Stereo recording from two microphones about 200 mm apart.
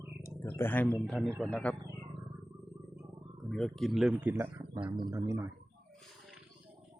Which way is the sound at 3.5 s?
Centre (ahead or behind).